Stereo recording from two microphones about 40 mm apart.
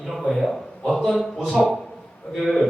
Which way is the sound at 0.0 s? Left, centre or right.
Centre.